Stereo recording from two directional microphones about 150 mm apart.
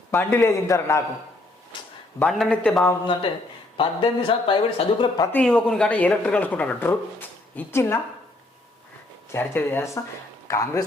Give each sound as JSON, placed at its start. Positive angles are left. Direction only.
{"t": 0.1, "sound": "speech", "side_deg": 15}
{"t": 1.7, "sound": "a sound", "side_deg": 30}
{"t": 2.3, "sound": "speech", "side_deg": 5}
{"t": 3.1, "sound": "speech", "side_deg": 35}
{"t": 4.9, "sound": "speech", "side_deg": 25}
{"t": 5.3, "sound": "speech", "side_deg": 5}
{"t": 9.3, "sound": "speech", "side_deg": 15}